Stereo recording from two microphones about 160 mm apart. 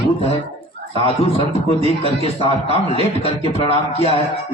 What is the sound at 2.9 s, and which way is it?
Speech, 40° left (ahead or behind).